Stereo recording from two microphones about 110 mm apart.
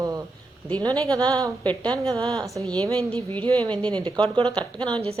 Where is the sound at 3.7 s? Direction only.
10° left (ahead or behind).